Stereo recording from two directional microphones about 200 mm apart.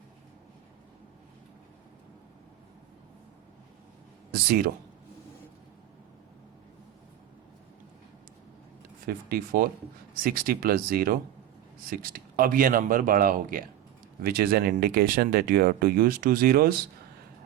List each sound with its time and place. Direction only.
4.3 s speech: 50° right (ahead or behind)
9.0 s speech: 50° right (ahead or behind)